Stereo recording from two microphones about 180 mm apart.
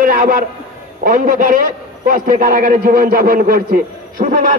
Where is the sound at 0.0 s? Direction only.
50° right (ahead or behind).